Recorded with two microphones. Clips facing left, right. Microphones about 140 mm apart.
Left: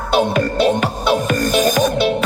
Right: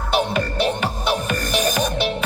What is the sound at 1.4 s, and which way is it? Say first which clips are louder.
Music: left 6 dB; 40° left (ahead or behind).